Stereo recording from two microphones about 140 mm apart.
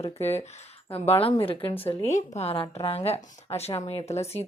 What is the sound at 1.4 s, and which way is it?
Speech, 40° left (ahead or behind).